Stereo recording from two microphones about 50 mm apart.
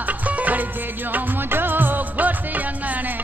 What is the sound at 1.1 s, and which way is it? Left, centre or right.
Music of bollywood, right.